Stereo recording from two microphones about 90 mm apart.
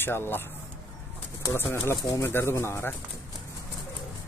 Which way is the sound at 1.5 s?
30° left (ahead or behind).